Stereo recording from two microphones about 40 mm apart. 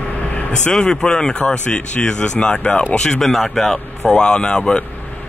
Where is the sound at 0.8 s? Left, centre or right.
Centre.